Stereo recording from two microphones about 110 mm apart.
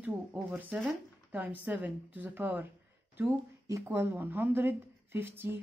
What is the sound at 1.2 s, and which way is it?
A woman's voice, 15° right (ahead or behind).